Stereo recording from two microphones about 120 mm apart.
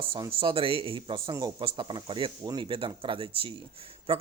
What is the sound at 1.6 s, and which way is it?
Speech, 45° right (ahead or behind).